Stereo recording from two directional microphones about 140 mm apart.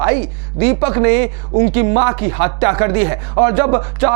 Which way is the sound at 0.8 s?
20° right (ahead or behind).